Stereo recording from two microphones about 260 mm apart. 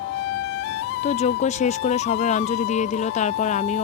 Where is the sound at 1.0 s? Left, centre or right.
Left.